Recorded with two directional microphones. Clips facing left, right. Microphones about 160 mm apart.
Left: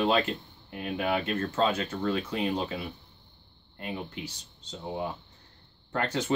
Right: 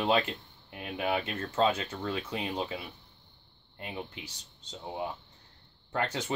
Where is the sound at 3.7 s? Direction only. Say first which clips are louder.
Left 4 dB; 20° right (ahead or behind).